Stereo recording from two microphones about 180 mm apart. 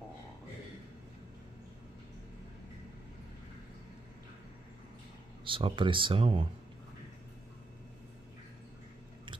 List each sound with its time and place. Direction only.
5.4 s speech: 30° right (ahead or behind)